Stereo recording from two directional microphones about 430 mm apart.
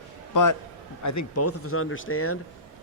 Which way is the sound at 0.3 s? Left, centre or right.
Left.